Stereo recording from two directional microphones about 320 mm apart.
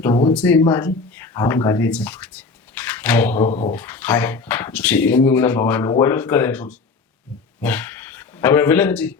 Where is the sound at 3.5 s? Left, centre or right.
Centre.